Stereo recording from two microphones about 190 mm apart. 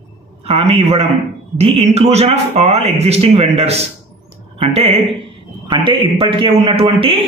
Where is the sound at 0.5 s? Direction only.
30° right (ahead or behind).